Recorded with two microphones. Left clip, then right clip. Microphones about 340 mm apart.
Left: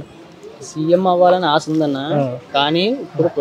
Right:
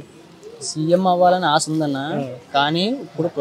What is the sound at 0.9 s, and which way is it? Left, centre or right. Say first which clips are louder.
Speech: left 3 dB; right.